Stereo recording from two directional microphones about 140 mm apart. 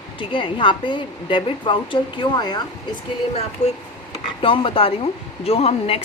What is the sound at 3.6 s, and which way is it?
Speech, 50° left (ahead or behind).